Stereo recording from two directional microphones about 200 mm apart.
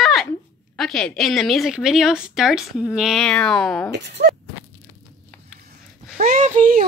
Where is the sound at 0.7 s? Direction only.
5° left (ahead or behind).